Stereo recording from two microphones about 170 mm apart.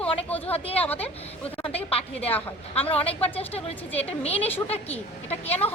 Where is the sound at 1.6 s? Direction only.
35° left (ahead or behind).